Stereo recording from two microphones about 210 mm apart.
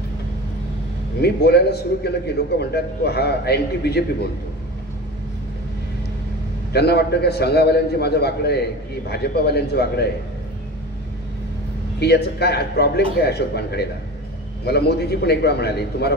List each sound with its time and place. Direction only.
1.2 s a man's voice: 50° left (ahead or behind)
6.7 s a man's voice: 50° left (ahead or behind)
12.0 s a man's voice: 50° left (ahead or behind)